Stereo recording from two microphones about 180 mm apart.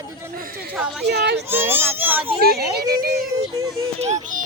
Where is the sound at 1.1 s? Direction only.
65° right (ahead or behind).